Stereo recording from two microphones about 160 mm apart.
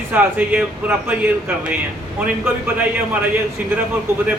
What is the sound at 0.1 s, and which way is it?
A man's voice, 10° right (ahead or behind).